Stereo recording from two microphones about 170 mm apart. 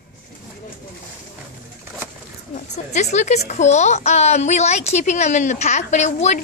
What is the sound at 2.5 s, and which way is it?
Speech, 45° left (ahead or behind).